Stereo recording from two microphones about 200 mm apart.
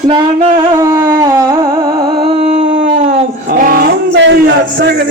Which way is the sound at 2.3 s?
30° right (ahead or behind).